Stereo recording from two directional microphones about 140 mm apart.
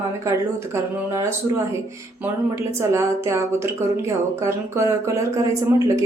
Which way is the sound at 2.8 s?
20° right (ahead or behind).